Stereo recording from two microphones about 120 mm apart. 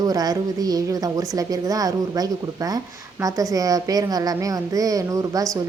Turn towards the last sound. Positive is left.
turn(degrees=-30)  # may be behind; listen again after turning